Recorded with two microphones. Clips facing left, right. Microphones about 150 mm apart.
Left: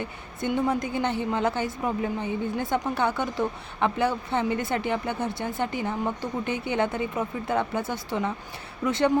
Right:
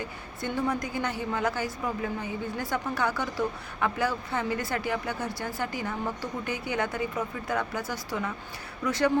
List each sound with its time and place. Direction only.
0.0 s a woman's voice: 20° left (ahead or behind)